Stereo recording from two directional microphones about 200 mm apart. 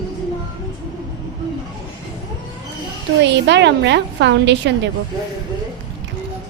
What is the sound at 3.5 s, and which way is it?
A woman's voice, 60° right (ahead or behind).